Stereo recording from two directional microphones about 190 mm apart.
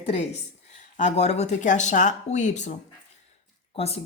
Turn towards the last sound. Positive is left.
turn(degrees=30)  # may be behind; listen again after turning